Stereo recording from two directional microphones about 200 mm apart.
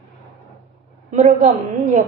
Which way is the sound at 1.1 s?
35° right (ahead or behind).